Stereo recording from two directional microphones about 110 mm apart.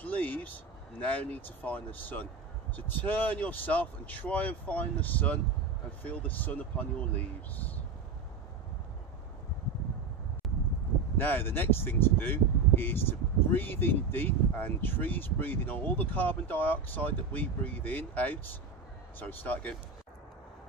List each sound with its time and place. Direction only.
0.0 s a sound: 15° left (ahead or behind)
0.9 s speech: 15° left (ahead or behind)
11.1 s speech: 20° left (ahead or behind)